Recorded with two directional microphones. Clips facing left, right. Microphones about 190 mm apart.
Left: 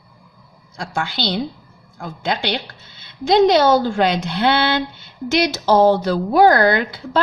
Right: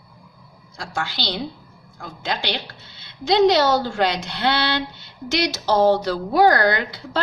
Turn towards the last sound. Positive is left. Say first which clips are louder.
# left 4 dB
turn(degrees=55)  # may be behind; listen again after turning